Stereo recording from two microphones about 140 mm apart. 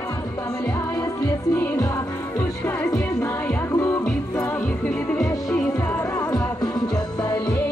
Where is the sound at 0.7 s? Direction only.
25° left (ahead or behind).